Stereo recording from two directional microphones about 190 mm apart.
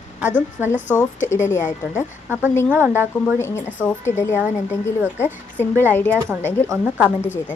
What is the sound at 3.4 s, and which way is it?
Speech, 15° left (ahead or behind).